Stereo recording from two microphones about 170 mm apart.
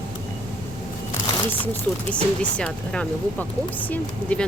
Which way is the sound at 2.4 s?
5° left (ahead or behind).